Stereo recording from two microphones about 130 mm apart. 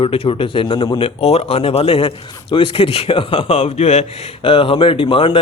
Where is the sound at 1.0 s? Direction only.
50° left (ahead or behind).